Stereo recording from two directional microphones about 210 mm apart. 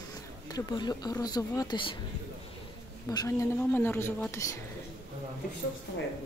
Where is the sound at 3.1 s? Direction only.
15° left (ahead or behind).